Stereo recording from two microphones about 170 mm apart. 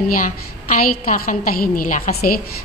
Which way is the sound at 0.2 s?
50° left (ahead or behind).